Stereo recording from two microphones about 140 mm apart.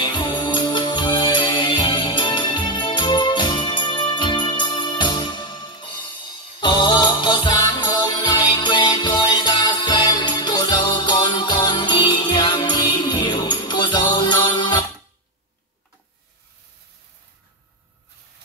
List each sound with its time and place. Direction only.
0.0 s music: 35° left (ahead or behind)